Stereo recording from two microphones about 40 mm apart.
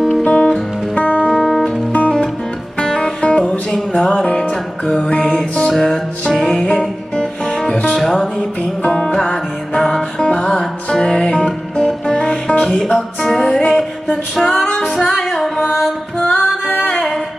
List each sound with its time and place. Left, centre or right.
0.2 s music: left
1.4 s music: centre
1.9 s music: left
5.7 s music: centre
6.7 s music: left
8.0 s music: centre
13.5 s music: left
14.3 s music: centre
15.6 s music: centre
16.2 s music: left